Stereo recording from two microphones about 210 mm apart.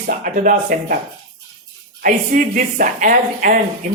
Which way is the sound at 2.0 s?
40° right (ahead or behind).